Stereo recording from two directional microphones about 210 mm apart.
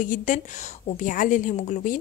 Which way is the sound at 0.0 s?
40° left (ahead or behind).